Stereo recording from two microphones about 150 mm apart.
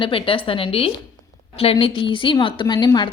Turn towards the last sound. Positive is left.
turn(degrees=30)  # may be behind; listen again after turning